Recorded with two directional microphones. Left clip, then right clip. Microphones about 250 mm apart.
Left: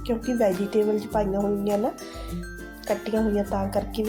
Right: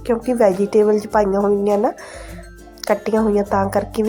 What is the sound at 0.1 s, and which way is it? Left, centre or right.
A woman's voice, centre.